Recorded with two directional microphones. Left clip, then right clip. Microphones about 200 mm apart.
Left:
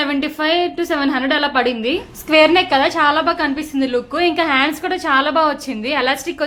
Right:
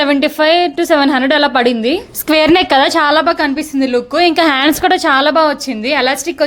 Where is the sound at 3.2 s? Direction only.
25° right (ahead or behind).